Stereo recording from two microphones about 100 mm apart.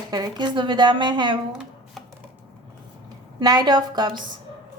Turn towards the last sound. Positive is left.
turn(degrees=-45)  # may be behind; listen again after turning